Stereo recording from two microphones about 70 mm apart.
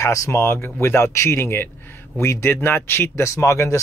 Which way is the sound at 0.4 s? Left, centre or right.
Left.